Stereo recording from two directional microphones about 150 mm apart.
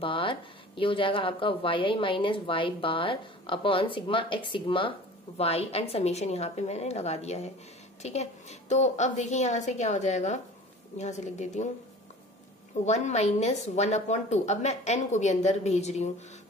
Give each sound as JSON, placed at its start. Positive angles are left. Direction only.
{"t": 0.0, "sound": "a woman's voice", "side_deg": 35}
{"t": 12.8, "sound": "a woman's voice", "side_deg": 50}